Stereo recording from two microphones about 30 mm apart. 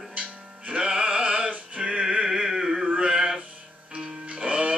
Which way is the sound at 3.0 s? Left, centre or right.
Right.